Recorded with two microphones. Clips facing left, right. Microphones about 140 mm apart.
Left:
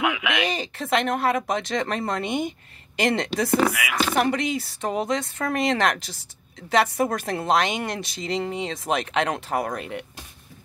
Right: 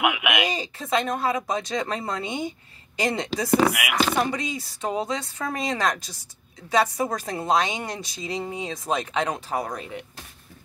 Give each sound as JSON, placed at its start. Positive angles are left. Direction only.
{"t": 0.0, "sound": "speech", "side_deg": -15}
{"t": 0.6, "sound": "a woman's voice", "side_deg": 65}
{"t": 3.7, "sound": "speech", "side_deg": -15}
{"t": 4.2, "sound": "a woman's voice", "side_deg": 60}